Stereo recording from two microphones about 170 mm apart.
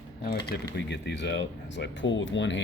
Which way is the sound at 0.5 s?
65° left (ahead or behind).